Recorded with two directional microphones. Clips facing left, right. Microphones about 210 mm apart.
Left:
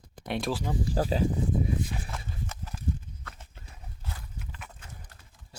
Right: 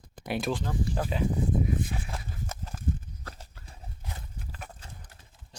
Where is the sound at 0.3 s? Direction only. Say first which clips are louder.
Right 1 dB; centre (ahead or behind).